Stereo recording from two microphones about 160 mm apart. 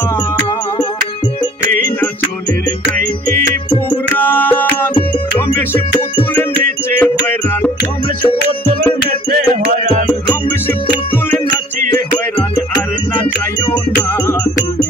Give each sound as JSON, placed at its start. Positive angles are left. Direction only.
{"t": 4.1, "sound": "music", "side_deg": 10}
{"t": 7.0, "sound": "music", "side_deg": 10}
{"t": 9.3, "sound": "music", "side_deg": -55}